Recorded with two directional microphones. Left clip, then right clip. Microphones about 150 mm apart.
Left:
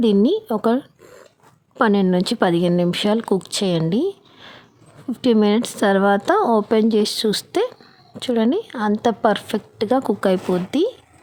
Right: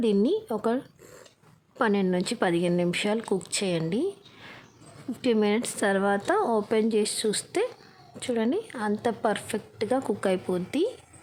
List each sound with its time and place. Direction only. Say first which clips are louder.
0.0 s speech: left 7 dB; 40° left (ahead or behind)